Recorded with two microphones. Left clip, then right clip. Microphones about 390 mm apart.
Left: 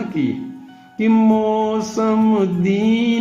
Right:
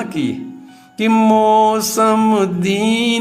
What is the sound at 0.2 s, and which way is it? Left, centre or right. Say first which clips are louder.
Music: left 3 dB; right.